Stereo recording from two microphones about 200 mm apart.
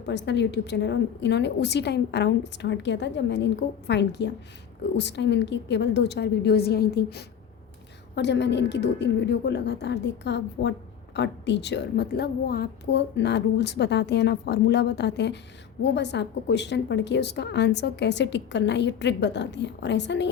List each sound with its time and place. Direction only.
0.0 s a woman's voice: 60° left (ahead or behind)